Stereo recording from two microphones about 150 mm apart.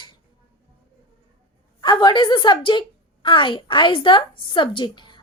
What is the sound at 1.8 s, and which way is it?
A woman's voice, 30° left (ahead or behind).